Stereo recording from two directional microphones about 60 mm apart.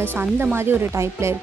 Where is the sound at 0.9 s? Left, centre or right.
Right.